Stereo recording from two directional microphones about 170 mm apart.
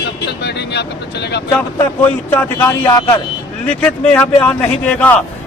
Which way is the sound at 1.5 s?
10° left (ahead or behind).